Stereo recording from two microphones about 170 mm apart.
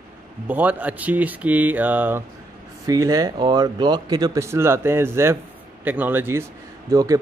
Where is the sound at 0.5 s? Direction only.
10° right (ahead or behind).